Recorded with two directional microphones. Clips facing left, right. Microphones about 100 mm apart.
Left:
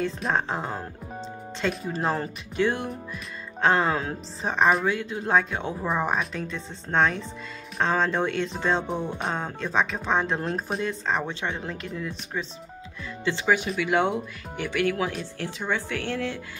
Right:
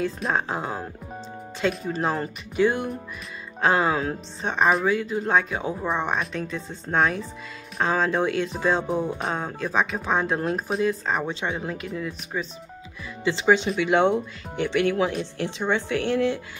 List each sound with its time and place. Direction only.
0.0 s speech: 5° right (ahead or behind)
13.2 s speech: 20° right (ahead or behind)